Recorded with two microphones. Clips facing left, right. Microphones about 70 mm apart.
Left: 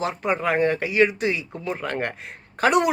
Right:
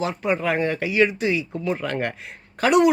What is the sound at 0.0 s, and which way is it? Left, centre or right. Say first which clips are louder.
Speech: right 1 dB; left.